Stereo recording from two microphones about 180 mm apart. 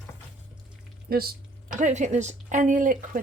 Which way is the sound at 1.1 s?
55° right (ahead or behind).